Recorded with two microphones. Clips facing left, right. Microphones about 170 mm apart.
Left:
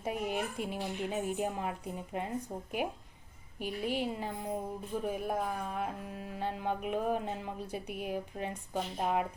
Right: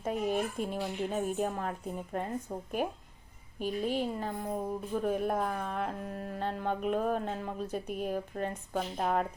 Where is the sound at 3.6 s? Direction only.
15° left (ahead or behind).